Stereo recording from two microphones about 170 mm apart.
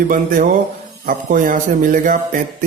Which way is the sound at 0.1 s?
50° right (ahead or behind).